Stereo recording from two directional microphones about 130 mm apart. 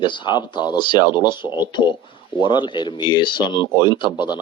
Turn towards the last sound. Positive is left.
turn(degrees=35)  # may be behind; listen again after turning